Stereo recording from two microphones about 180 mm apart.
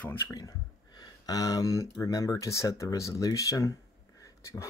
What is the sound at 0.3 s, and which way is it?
Speech, 20° left (ahead or behind).